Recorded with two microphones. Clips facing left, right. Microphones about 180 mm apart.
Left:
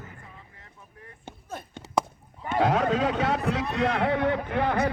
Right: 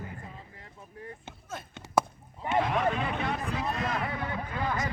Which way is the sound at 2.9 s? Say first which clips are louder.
Left 7 dB; 90° left.